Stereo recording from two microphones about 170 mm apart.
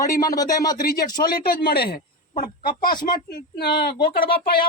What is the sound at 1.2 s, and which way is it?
Speech, 60° left (ahead or behind).